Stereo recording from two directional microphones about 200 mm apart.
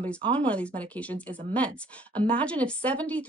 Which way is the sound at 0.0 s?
5° left (ahead or behind).